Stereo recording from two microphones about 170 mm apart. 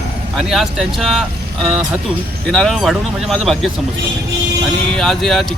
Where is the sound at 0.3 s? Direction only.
Centre (ahead or behind).